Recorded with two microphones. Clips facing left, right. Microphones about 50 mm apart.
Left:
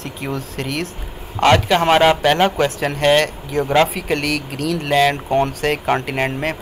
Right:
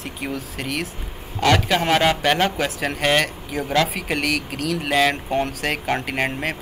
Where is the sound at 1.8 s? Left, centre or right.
Left.